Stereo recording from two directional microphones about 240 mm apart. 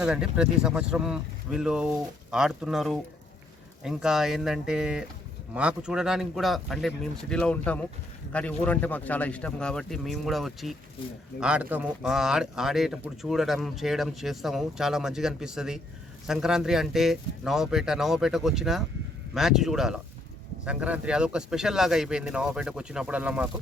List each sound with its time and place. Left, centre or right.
0.0 s speech: centre